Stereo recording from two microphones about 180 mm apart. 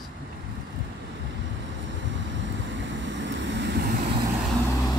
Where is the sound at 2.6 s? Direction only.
90° right; by 3.9 s 70° right (ahead or behind).